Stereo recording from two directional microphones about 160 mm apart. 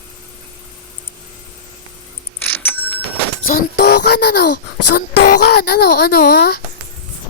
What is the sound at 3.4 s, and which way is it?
Music, 65° left (ahead or behind).